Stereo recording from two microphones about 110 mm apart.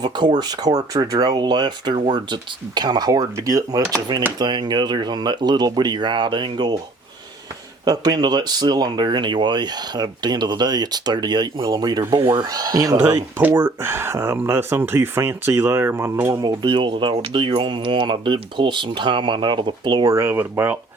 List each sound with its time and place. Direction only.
0.0 s speech: 40° right (ahead or behind)
7.9 s speech: 35° right (ahead or behind)
13.4 s speech: 20° right (ahead or behind)
16.5 s speech: 45° right (ahead or behind)
20.1 s speech: 25° right (ahead or behind)